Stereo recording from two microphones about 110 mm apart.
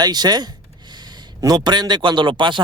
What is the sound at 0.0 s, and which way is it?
A man's voice, 40° right (ahead or behind).